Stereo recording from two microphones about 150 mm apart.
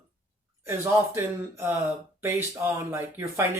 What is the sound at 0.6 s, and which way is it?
Speech, 15° right (ahead or behind).